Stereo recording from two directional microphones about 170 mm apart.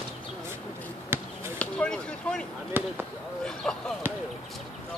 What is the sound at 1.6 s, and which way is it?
Speech, 5° left (ahead or behind).